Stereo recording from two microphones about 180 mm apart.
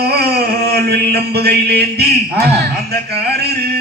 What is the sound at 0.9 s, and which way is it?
Music, 65° right (ahead or behind).